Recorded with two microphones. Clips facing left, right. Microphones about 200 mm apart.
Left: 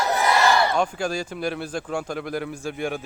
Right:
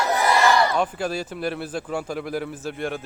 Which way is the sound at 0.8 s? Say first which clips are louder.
Even; 5° right (ahead or behind).